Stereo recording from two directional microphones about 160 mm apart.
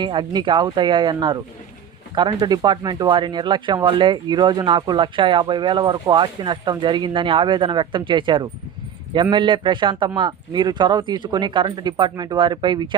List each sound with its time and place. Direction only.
0.0 s a man's voice: 30° right (ahead or behind)